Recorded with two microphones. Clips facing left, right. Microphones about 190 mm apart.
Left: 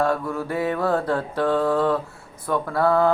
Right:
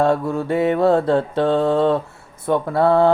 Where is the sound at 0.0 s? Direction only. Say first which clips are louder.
Right 5 dB; 25° right (ahead or behind).